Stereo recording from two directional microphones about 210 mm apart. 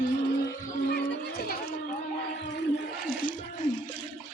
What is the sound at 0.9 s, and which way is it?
Music, 50° left (ahead or behind).